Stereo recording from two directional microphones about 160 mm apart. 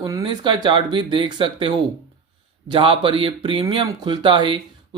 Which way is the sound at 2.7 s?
35° right (ahead or behind).